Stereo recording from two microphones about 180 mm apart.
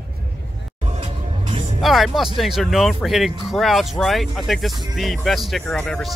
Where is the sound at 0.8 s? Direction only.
35° right (ahead or behind).